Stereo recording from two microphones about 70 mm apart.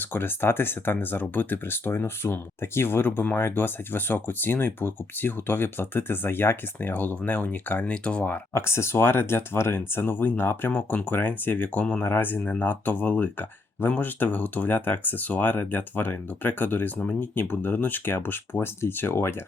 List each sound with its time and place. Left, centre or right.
0.0 s speech: left
8.5 s speech: left
10.7 s speech: centre